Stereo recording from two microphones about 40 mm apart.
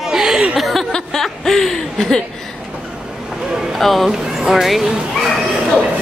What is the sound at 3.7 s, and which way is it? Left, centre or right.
Speech, centre.